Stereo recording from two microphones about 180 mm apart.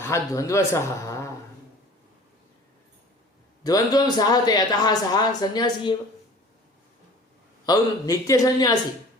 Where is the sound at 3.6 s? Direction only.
20° left (ahead or behind).